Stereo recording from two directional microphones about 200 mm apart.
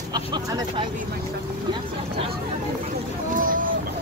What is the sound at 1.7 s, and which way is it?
Vehicle, 30° right (ahead or behind).